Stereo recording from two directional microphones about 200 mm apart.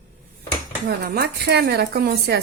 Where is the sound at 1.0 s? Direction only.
50° right (ahead or behind).